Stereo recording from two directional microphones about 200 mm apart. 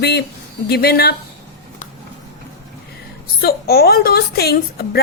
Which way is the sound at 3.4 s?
50° left (ahead or behind).